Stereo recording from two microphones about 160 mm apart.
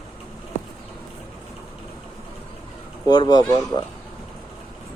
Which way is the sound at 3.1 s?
25° left (ahead or behind).